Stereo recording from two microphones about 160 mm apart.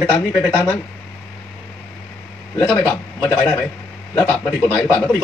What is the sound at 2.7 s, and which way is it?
Speech, 10° left (ahead or behind).